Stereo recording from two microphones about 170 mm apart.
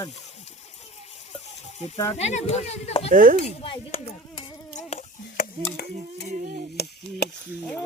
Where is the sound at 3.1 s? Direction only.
55° right (ahead or behind).